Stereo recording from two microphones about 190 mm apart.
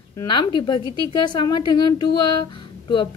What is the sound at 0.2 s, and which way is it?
A woman's voice, 25° left (ahead or behind).